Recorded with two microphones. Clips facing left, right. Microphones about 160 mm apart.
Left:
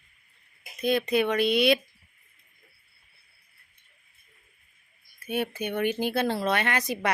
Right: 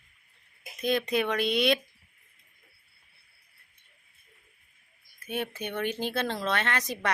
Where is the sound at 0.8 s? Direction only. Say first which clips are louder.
Left 3 dB; 5° left (ahead or behind).